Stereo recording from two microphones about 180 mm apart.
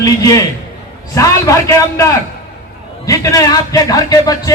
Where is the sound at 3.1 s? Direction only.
20° left (ahead or behind).